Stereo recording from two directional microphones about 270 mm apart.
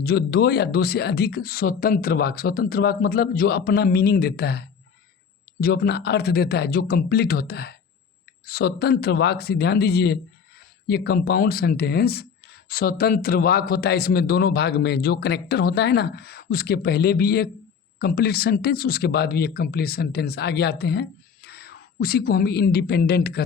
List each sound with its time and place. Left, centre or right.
0.0 s speech: left